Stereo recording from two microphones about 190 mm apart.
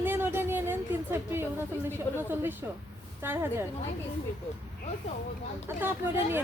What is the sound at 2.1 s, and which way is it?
A woman's voice, 10° right (ahead or behind).